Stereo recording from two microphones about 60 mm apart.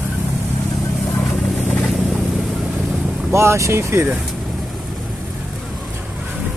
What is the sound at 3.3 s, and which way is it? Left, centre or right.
Speech, right.